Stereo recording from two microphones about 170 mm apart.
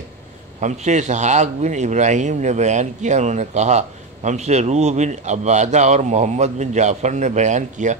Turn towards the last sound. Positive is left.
turn(degrees=-45)  # may be behind; listen again after turning